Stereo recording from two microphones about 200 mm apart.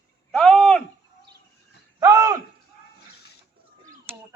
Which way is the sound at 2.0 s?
15° right (ahead or behind).